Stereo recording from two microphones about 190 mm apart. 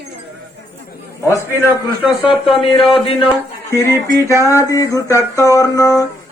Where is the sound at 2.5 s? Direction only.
30° left (ahead or behind).